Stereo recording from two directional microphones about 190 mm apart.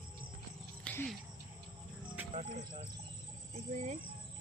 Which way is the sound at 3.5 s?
40° right (ahead or behind).